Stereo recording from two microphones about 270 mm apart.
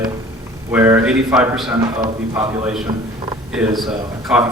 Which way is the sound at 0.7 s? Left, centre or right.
Centre.